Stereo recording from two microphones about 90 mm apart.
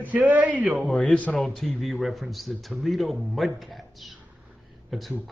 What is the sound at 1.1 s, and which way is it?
Speech, 15° left (ahead or behind).